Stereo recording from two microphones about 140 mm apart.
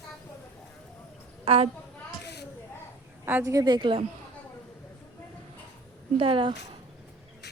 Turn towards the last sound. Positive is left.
turn(degrees=-40)  # may be behind; listen again after turning